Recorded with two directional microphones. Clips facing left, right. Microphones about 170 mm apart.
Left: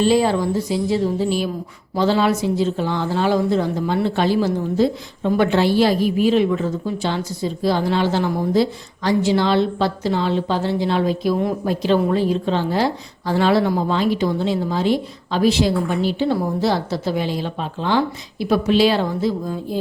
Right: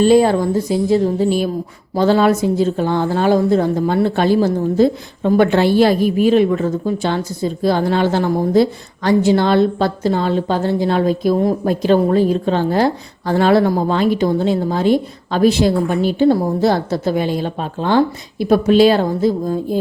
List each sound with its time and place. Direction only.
0.0 s a woman's voice: 50° right (ahead or behind)